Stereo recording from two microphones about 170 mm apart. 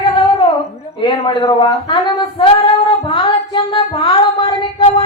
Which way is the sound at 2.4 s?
30° left (ahead or behind).